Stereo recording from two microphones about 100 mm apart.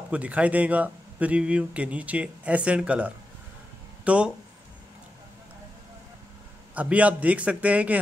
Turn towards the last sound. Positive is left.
turn(degrees=-15)  # may be behind; listen again after turning